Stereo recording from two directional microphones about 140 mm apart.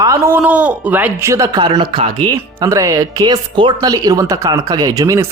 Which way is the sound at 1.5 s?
30° right (ahead or behind).